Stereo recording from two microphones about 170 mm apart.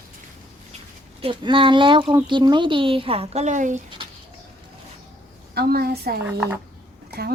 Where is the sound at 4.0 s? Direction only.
30° right (ahead or behind).